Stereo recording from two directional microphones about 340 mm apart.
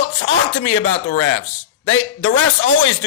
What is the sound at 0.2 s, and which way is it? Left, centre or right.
Speech, left.